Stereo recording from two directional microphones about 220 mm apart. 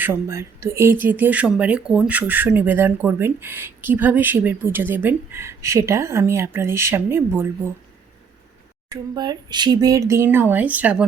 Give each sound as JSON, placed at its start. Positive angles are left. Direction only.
{"t": 0.0, "sound": "speech", "side_deg": -10}
{"t": 8.9, "sound": "speech", "side_deg": -20}